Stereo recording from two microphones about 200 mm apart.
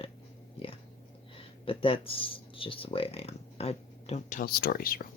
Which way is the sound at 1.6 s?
25° left (ahead or behind).